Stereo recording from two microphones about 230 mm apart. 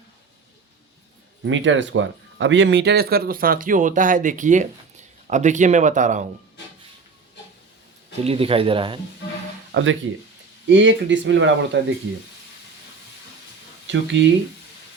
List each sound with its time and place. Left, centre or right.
1.5 s speech: right
8.2 s speech: right
9.7 s speech: right
13.8 s speech: right